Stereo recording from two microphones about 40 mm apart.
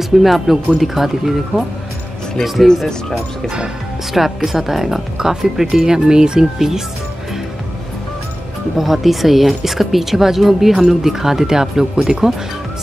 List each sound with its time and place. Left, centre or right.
0.2 s speech: centre
4.1 s speech: centre
8.7 s speech: centre